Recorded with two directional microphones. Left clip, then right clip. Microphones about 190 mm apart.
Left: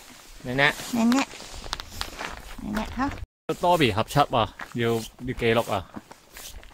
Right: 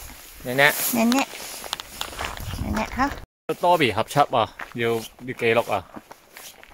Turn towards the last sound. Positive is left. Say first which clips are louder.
# right 1 dB
turn(degrees=0)  # may be behind; listen again after turning